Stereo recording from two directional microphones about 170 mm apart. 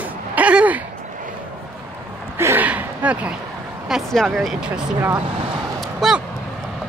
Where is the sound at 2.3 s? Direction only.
15° right (ahead or behind).